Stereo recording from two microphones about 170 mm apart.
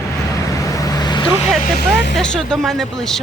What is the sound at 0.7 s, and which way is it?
Vehicle, 20° left (ahead or behind).